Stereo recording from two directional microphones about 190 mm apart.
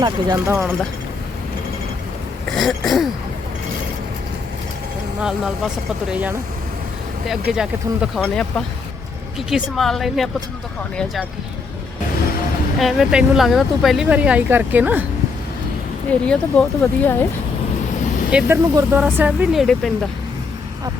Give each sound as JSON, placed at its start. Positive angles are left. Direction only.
{"t": 0.0, "sound": "speech", "side_deg": -20}
{"t": 0.5, "sound": "speech", "side_deg": -5}
{"t": 2.6, "sound": "speech", "side_deg": 0}
{"t": 5.2, "sound": "speech", "side_deg": -5}
{"t": 12.8, "sound": "speech", "side_deg": 0}
{"t": 16.2, "sound": "speech", "side_deg": 5}
{"t": 18.3, "sound": "speech", "side_deg": -10}